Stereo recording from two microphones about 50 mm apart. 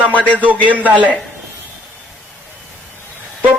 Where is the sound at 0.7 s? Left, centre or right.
Right.